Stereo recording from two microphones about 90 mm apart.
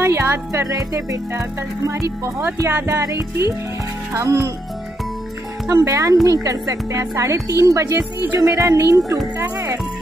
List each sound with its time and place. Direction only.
0.0 s speech: 30° right (ahead or behind)
5.7 s speech: 35° right (ahead or behind)
7.8 s speech: 25° right (ahead or behind)
8.4 s speech: 40° right (ahead or behind)